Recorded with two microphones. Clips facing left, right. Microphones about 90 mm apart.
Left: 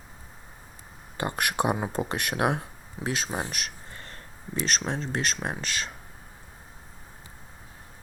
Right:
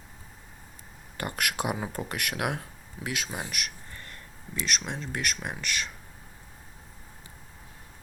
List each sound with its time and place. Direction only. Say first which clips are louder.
1.1 s speech: left 4 dB; 20° left (ahead or behind)